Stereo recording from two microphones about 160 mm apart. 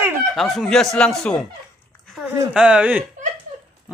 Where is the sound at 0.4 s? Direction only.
Centre (ahead or behind).